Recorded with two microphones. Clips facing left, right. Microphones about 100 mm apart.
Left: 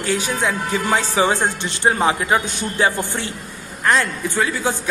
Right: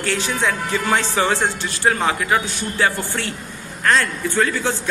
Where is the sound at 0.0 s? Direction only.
15° left (ahead or behind).